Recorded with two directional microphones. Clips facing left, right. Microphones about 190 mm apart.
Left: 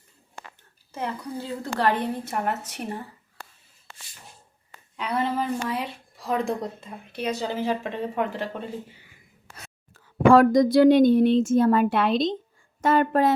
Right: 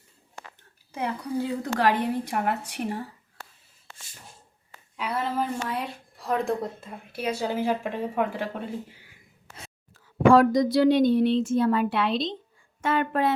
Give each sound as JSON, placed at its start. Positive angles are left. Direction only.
{"t": 0.9, "sound": "a woman's voice", "side_deg": -15}
{"t": 4.9, "sound": "a woman's voice", "side_deg": -5}
{"t": 9.9, "sound": "a woman's voice", "side_deg": 50}